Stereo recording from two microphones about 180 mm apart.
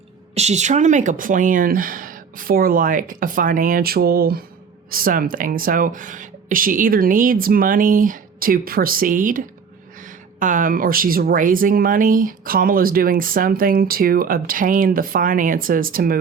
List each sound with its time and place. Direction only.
0.3 s speech: 40° right (ahead or behind)